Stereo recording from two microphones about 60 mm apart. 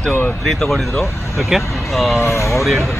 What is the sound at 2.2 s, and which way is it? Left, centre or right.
Speech, left.